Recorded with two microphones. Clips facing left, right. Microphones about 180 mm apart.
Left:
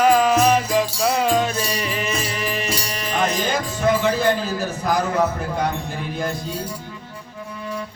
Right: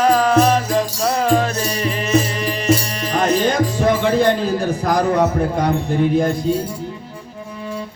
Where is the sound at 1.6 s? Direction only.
35° right (ahead or behind).